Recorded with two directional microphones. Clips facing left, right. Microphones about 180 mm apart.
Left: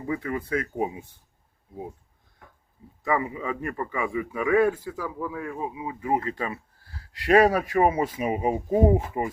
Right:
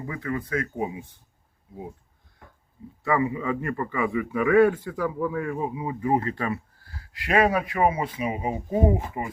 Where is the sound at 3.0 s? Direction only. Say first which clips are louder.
Right 2 dB; 15° left (ahead or behind).